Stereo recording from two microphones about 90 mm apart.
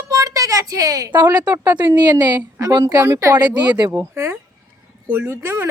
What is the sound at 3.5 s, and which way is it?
Speech, 55° right (ahead or behind).